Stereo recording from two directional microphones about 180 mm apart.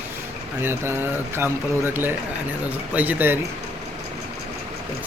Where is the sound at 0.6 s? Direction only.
15° right (ahead or behind).